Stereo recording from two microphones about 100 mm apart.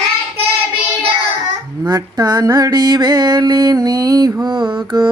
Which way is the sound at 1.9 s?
40° right (ahead or behind).